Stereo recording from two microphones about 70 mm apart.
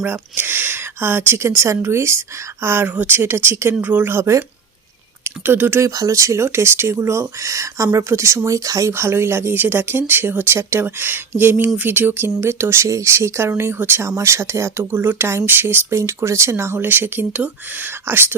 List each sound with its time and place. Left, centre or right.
0.0 s speech: right
5.5 s speech: right
5.8 s speech: right
8.4 s speech: right
8.9 s speech: right
14.2 s speech: right